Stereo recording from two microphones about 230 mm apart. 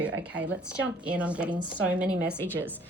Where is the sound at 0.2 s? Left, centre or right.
Centre.